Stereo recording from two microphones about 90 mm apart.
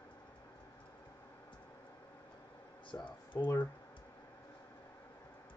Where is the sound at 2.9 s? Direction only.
65° left (ahead or behind).